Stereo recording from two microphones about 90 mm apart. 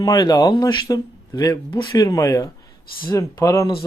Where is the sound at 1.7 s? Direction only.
60° left (ahead or behind).